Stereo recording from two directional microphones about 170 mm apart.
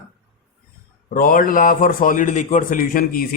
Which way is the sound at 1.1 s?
55° left (ahead or behind).